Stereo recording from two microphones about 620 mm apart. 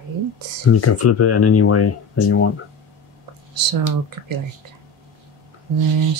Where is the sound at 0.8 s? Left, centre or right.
Left.